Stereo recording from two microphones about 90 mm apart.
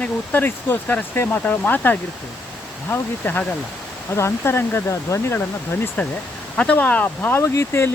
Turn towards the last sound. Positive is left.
turn(degrees=30)  # may be behind; listen again after turning